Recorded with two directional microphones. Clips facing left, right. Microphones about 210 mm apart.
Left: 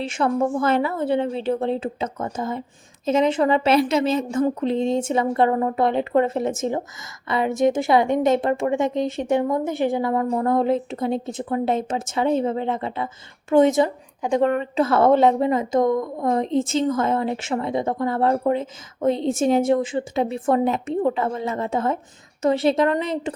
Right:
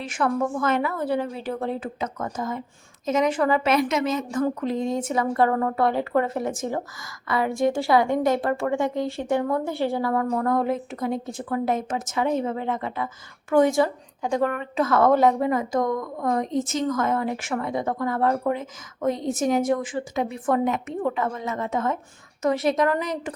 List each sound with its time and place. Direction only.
0.0 s a woman's voice: 25° left (ahead or behind)